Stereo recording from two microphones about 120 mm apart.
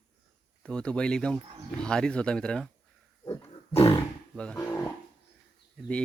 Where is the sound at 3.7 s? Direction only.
55° left (ahead or behind).